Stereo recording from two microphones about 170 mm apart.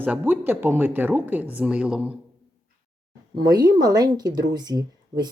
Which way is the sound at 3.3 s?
20° right (ahead or behind).